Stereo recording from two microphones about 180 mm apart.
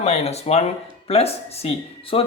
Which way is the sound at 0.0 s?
35° left (ahead or behind).